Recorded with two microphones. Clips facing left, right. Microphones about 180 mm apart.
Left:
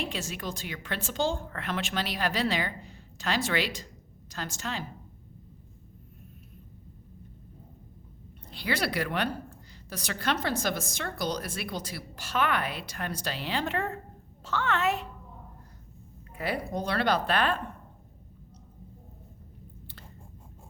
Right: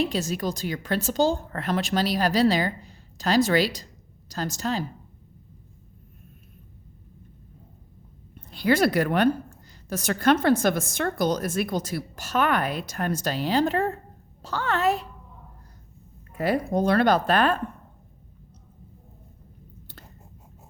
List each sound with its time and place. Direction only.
0.0 s speech: 40° right (ahead or behind)
8.4 s a woman's voice: 45° right (ahead or behind)
16.3 s a woman's voice: 45° right (ahead or behind)